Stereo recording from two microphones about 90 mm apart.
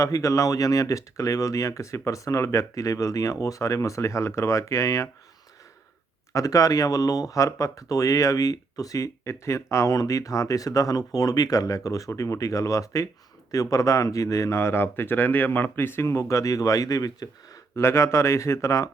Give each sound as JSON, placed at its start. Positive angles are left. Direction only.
{"t": 0.0, "sound": "speech", "side_deg": 40}
{"t": 6.3, "sound": "speech", "side_deg": 40}
{"t": 17.7, "sound": "speech", "side_deg": 30}